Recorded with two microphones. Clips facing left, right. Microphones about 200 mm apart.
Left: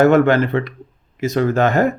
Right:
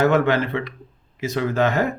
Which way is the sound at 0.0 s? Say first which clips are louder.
Left 6 dB; 50° left (ahead or behind).